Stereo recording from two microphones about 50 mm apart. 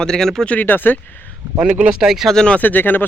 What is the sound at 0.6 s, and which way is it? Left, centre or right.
Speech, left.